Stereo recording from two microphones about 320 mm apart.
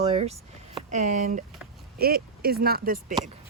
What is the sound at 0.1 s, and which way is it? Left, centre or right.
Speech, centre.